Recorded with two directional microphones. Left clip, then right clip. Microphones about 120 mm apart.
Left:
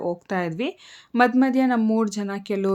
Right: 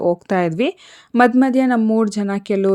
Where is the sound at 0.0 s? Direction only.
50° right (ahead or behind).